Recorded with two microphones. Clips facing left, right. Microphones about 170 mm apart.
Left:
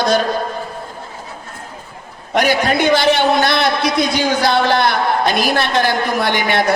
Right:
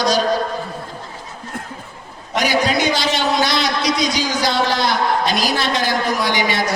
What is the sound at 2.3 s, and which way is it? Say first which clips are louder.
A man's voice: left 3 dB; 55° left (ahead or behind).